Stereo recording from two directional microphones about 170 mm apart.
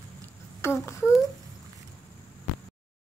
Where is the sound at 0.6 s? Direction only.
15° left (ahead or behind).